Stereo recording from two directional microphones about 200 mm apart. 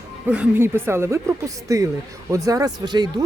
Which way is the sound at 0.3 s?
10° right (ahead or behind).